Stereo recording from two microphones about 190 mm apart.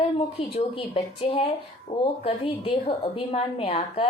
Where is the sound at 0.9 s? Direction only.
30° left (ahead or behind).